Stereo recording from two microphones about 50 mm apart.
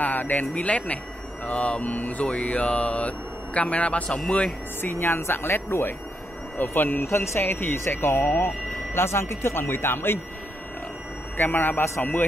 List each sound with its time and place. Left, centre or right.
0.0 s speech: left
4.9 s a man's voice: left
7.1 s speech: left
8.9 s speech: left
11.3 s a man's voice: left